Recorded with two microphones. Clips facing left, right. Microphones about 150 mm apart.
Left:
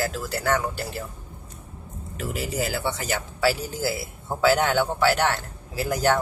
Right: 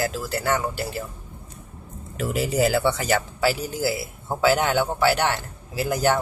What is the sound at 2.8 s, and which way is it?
Speech, 75° right (ahead or behind).